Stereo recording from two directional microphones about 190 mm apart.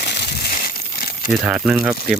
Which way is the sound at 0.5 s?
50° left (ahead or behind).